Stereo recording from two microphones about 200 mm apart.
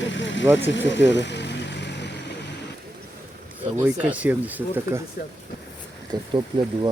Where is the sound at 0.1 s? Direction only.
65° left (ahead or behind).